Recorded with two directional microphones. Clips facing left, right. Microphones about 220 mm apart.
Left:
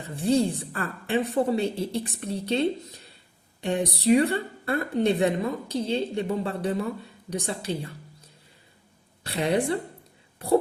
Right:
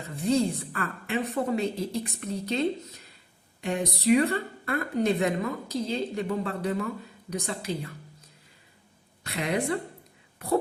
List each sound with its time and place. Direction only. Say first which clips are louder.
0.2 s speech: left 2 dB; 30° left (ahead or behind)
9.2 s speech: left 4 dB; 30° left (ahead or behind)
10.3 s whispering: left 4 dB; 30° left (ahead or behind)